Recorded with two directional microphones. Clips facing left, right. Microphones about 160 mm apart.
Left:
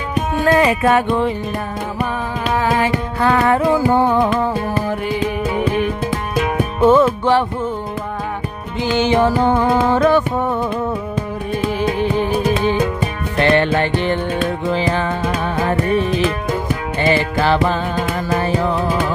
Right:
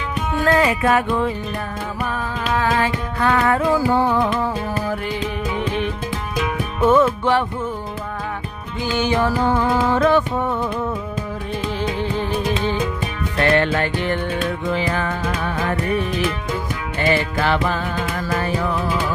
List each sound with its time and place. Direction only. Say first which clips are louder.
0.3 s music: left 2 dB; 15° left (ahead or behind)
0.6 s music: left 3 dB; 30° left (ahead or behind)
2.5 s music: left 2 dB; 15° left (ahead or behind)
3.2 s music: left 3 dB; 30° left (ahead or behind)
6.9 s music: even; 30° left (ahead or behind)
8.8 s music: left 5 dB; 20° left (ahead or behind)
11.8 s music: left 5 dB; 15° left (ahead or behind)
13.4 s music: left 3 dB; 25° left (ahead or behind)